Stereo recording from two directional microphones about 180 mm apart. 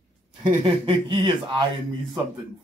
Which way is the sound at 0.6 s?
30° right (ahead or behind).